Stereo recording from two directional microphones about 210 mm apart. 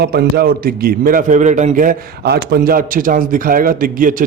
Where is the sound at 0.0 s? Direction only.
50° right (ahead or behind).